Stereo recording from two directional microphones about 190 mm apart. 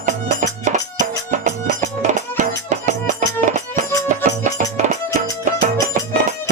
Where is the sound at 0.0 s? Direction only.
40° right (ahead or behind).